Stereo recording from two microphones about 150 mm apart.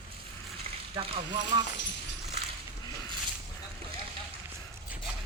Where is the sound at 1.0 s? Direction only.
40° right (ahead or behind).